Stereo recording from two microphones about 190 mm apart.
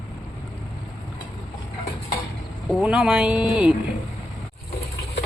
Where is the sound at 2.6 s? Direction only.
Centre (ahead or behind).